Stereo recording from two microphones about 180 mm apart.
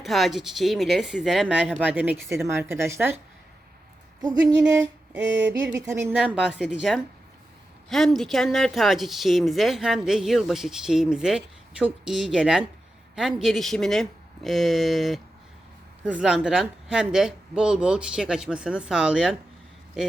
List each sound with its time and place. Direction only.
0.0 s speech: centre (ahead or behind)
4.2 s speech: 20° right (ahead or behind)
6.1 s speech: 5° right (ahead or behind)